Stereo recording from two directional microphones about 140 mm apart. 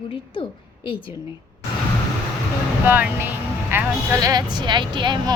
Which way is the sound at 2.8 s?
15° right (ahead or behind).